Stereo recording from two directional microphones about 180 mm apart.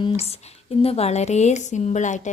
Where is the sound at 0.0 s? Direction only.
35° left (ahead or behind).